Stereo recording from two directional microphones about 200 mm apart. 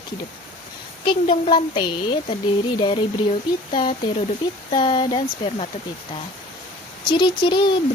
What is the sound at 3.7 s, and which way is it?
Speech, 25° left (ahead or behind).